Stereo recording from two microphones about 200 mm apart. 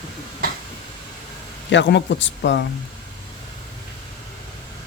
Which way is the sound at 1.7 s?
60° left (ahead or behind).